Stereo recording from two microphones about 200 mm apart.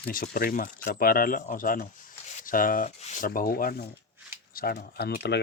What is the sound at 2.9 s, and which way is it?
Rub, 35° left (ahead or behind).